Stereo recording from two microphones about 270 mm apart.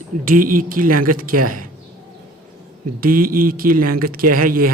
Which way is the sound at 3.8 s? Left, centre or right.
Right.